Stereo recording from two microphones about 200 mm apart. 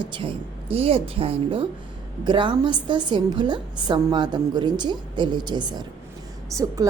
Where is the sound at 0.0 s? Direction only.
25° right (ahead or behind).